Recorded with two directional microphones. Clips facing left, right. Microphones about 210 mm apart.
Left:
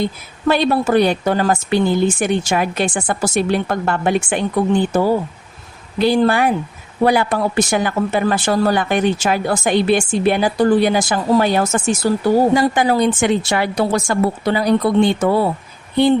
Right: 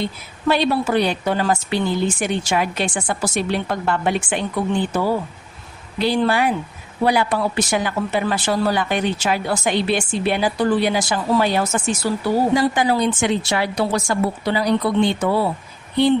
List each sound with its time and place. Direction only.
0.0 s a woman's voice: 50° left (ahead or behind)
6.0 s a woman's voice: 45° left (ahead or behind)